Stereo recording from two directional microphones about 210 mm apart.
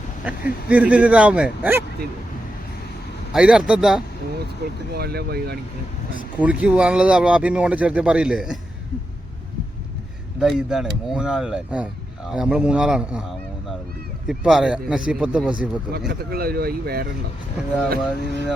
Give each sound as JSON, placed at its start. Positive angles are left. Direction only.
{"t": 0.3, "sound": "speech", "side_deg": -5}
{"t": 3.3, "sound": "speech", "side_deg": -5}
{"t": 4.4, "sound": "speech", "side_deg": -50}
{"t": 6.4, "sound": "speech", "side_deg": -5}
{"t": 10.4, "sound": "speech", "side_deg": 0}
{"t": 14.3, "sound": "speech", "side_deg": 0}
{"t": 15.9, "sound": "speech", "side_deg": -50}
{"t": 18.2, "sound": "speech", "side_deg": 55}